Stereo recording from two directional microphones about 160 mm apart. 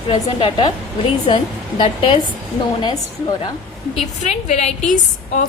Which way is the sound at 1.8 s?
35° left (ahead or behind).